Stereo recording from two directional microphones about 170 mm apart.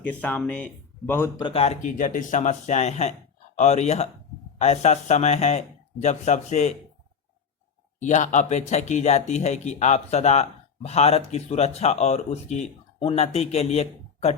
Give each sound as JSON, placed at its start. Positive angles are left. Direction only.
{"t": 0.0, "sound": "speech", "side_deg": 10}
{"t": 1.4, "sound": "speech", "side_deg": 30}
{"t": 8.0, "sound": "speech", "side_deg": 45}